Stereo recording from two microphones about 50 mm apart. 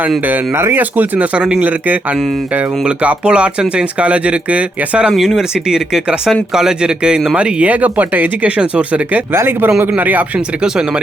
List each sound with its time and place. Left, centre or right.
0.5 s speech: right
0.8 s speech: right
1.4 s speech: right
2.8 s speech: right
5.1 s speech: centre
5.4 s speech: centre; by 9.2 s right
9.3 s speech: right
10.0 s speech: right